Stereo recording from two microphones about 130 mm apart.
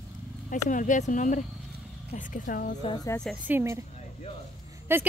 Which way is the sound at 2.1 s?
90° left.